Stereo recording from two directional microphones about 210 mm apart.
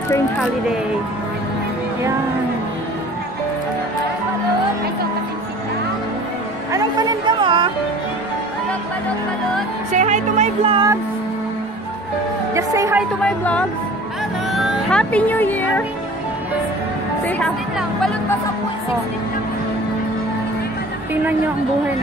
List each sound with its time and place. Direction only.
6.7 s a woman's voice: 20° right (ahead or behind)
9.9 s speech: 35° right (ahead or behind)
12.5 s a woman's voice: 15° right (ahead or behind)
13.2 s speech: 5° left (ahead or behind)
17.4 s speech: centre (ahead or behind)